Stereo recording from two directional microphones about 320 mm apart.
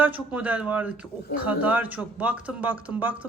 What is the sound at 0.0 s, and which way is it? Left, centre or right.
Speech, centre.